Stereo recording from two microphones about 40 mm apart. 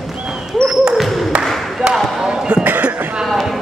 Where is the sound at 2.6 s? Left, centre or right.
Right.